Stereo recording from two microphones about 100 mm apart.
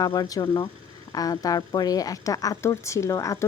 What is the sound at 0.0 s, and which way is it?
A woman's voice, 40° left (ahead or behind).